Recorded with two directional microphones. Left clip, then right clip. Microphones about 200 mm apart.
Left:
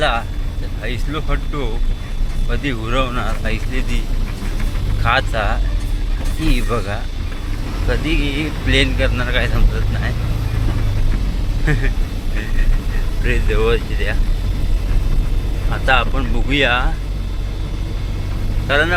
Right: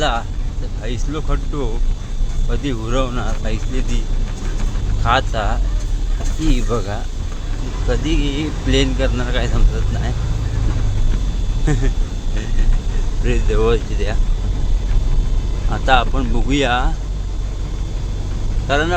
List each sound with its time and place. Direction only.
0.0 s speech: 20° right (ahead or behind)
5.0 s speech: 20° right (ahead or behind)
11.6 s speech: 20° right (ahead or behind)
13.2 s speech: 20° right (ahead or behind)
15.7 s speech: 20° right (ahead or behind)
18.7 s speech: 20° right (ahead or behind)